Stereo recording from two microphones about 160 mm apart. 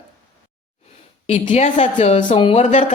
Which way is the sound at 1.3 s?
45° left (ahead or behind).